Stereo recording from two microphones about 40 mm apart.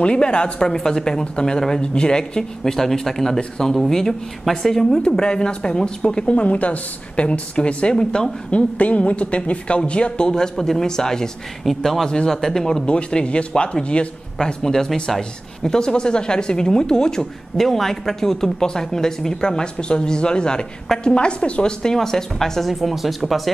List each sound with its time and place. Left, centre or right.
0.0 s speech: left
6.3 s a woman's voice: left
8.0 s speech: centre
8.5 s a woman's voice: left; by 11.2 s centre
11.6 s speech: centre
12.8 s speech: left
14.4 s speech: centre
17.6 s speech: centre; by 21.7 s left
21.8 s speech: centre
22.7 s speech: centre